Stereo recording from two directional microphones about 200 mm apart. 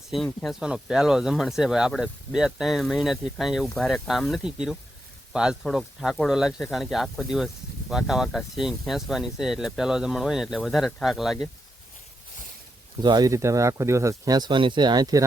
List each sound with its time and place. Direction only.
0.1 s speech: centre (ahead or behind)
13.0 s speech: 20° right (ahead or behind)